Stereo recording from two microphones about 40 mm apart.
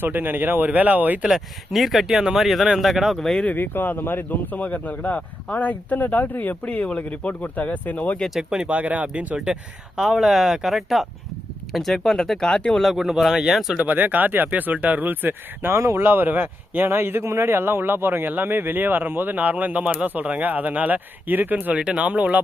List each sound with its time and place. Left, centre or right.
0.0 s speech: right
1.3 s speech: centre
3.2 s speech: centre
3.6 s speech: left
6.6 s speech: left
8.3 s speech: centre
8.5 s speech: right
10.0 s speech: centre; by 12.7 s left
12.9 s speech: centre
13.7 s speech: right
16.9 s speech: right
21.7 s speech: right
22.0 s speech: right